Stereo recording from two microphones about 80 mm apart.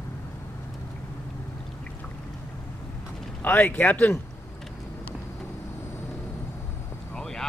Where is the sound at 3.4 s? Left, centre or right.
Left.